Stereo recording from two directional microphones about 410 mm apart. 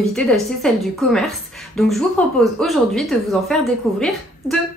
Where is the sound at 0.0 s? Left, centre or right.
Centre.